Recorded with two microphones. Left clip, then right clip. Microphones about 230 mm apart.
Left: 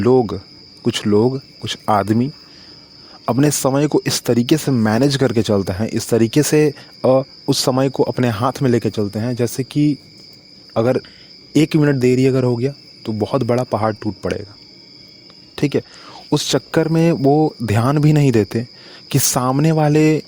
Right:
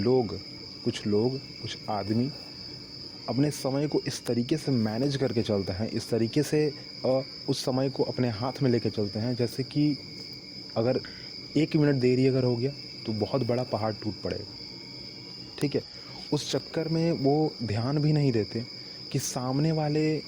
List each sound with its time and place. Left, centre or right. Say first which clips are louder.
0.0 s speech: left 11 dB; left
15.5 s speech: left 11 dB; left